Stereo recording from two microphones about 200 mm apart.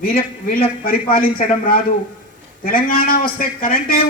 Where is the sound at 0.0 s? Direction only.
45° left (ahead or behind).